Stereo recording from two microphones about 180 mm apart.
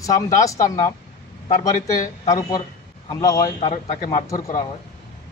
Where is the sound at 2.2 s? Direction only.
20° left (ahead or behind).